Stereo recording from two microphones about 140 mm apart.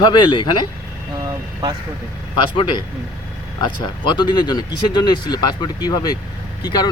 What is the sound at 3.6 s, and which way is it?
Speech, 35° left (ahead or behind).